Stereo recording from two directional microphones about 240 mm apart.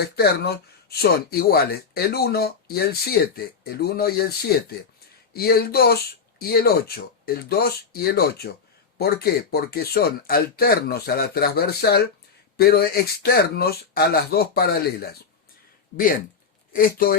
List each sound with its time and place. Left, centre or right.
0.0 s speech: left
5.3 s speech: left
16.7 s speech: left